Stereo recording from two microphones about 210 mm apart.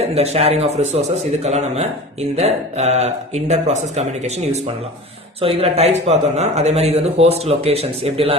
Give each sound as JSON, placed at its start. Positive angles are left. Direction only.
{"t": 0.0, "sound": "a man's voice", "side_deg": -30}